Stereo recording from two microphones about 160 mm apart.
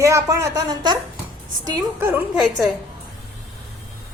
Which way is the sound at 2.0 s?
15° right (ahead or behind).